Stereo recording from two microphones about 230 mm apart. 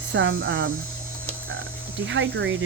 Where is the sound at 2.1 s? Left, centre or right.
Right.